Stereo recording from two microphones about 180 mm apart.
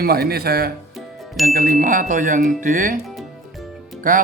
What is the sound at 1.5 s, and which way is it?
Speech, 50° right (ahead or behind).